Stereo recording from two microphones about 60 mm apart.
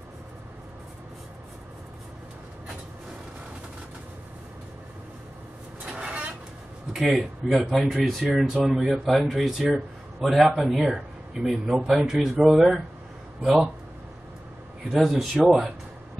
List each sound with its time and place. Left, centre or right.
5.9 s vehicle: centre
6.9 s a man's voice: centre
14.9 s a man's voice: centre